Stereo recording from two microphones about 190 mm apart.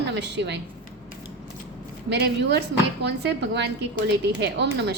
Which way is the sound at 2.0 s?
65° right (ahead or behind).